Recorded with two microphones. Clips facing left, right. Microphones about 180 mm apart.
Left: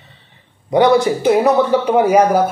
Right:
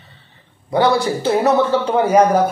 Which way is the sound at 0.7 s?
15° left (ahead or behind).